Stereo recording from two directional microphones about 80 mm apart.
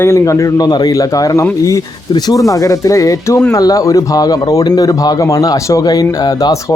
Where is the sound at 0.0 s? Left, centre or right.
Left.